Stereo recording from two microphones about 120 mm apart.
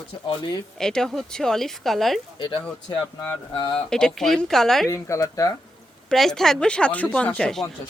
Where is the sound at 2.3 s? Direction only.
45° left (ahead or behind).